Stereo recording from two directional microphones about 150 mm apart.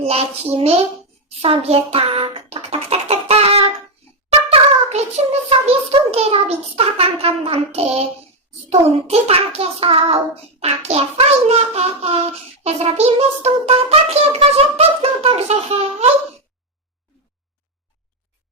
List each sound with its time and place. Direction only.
0.0 s child singing: 40° right (ahead or behind)
1.4 s a child's voice: 40° right (ahead or behind)
10.6 s child singing: 45° right (ahead or behind)